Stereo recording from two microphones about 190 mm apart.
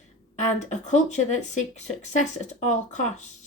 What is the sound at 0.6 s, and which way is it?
A woman's voice, 40° left (ahead or behind).